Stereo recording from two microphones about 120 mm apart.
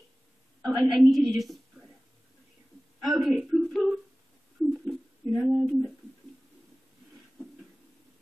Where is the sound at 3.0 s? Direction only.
Centre (ahead or behind).